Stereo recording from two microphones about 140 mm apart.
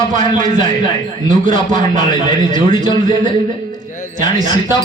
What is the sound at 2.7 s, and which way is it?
Speech, 30° left (ahead or behind).